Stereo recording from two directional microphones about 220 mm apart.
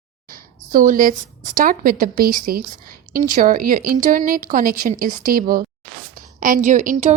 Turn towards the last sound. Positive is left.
turn(degrees=-35)  # may be behind; listen again after turning